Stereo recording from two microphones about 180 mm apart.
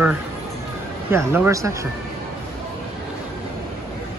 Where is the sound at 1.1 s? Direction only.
15° right (ahead or behind).